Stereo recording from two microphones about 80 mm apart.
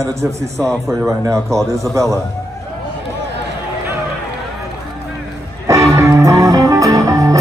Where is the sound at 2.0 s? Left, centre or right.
Right.